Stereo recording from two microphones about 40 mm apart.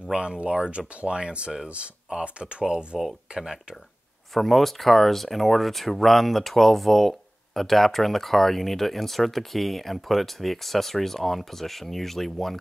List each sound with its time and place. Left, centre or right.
0.1 s speech: centre
4.3 s speech: centre